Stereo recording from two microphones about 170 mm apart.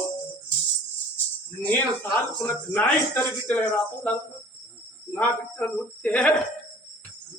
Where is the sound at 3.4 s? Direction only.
10° left (ahead or behind).